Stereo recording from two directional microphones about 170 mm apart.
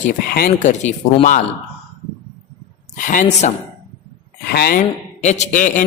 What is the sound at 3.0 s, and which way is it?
Speech, 50° left (ahead or behind).